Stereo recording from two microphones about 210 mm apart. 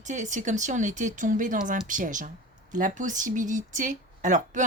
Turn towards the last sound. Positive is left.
turn(degrees=-35)  # may be behind; listen again after turning